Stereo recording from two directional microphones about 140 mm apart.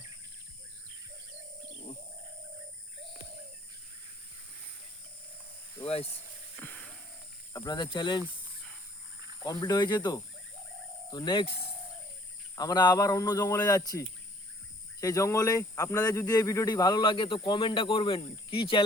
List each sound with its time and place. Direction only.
5.8 s speech: 40° left (ahead or behind)
6.6 s a sound: 10° left (ahead or behind)
7.5 s speech: 30° left (ahead or behind)
9.4 s speech: 25° left (ahead or behind)
12.5 s speech: 30° left (ahead or behind)
15.0 s speech: 20° left (ahead or behind)